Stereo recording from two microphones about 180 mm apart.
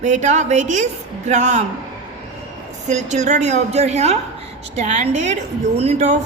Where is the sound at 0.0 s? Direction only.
40° right (ahead or behind).